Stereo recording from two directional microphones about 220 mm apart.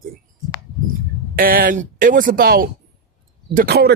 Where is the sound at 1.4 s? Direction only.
40° right (ahead or behind).